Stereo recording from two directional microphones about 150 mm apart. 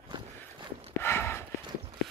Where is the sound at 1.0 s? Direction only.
15° left (ahead or behind).